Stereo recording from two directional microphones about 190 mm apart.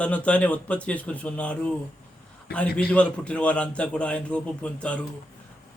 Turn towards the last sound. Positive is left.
turn(degrees=5)  # may be behind; listen again after turning